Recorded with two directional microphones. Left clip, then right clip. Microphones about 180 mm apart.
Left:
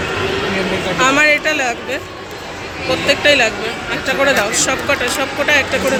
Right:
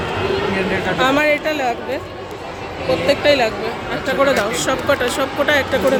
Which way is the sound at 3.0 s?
10° right (ahead or behind).